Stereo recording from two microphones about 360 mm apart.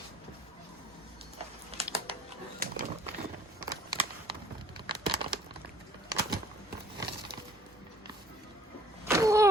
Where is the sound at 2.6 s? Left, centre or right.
Right.